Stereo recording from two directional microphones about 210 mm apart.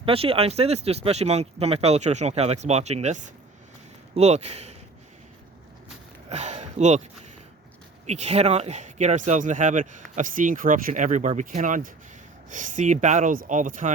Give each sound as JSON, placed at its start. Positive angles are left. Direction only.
{"t": 0.0, "sound": "speech", "side_deg": -25}
{"t": 6.2, "sound": "a sound", "side_deg": -30}
{"t": 8.0, "sound": "speech", "side_deg": -30}